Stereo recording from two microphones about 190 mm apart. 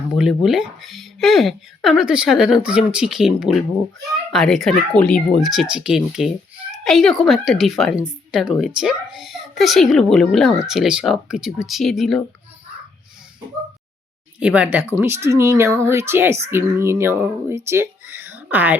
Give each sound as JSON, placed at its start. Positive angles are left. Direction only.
{"t": 0.2, "sound": "speech", "side_deg": 0}
{"t": 14.3, "sound": "speech", "side_deg": -5}